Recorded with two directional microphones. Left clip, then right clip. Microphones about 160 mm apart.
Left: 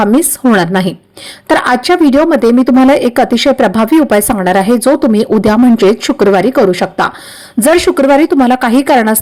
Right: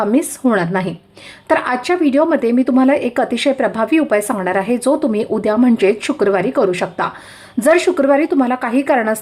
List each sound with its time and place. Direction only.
0.0 s a woman's voice: 30° left (ahead or behind)